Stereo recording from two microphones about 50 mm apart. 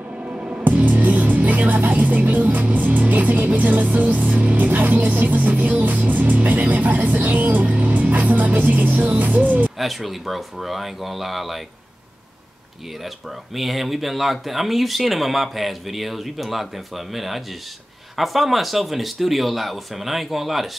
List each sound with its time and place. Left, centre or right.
0.2 s music: right
0.7 s speech: right
9.8 s speech: centre
13.6 s speech: centre